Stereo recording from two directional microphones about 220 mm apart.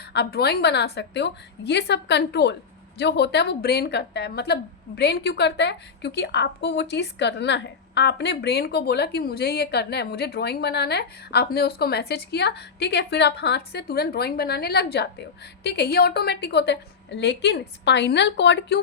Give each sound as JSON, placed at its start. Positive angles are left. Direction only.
{"t": 0.1, "sound": "a woman's voice", "side_deg": 50}